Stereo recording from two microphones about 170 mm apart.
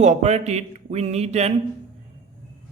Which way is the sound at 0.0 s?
40° right (ahead or behind).